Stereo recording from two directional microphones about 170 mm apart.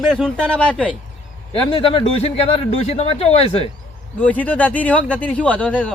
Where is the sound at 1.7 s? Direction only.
30° left (ahead or behind).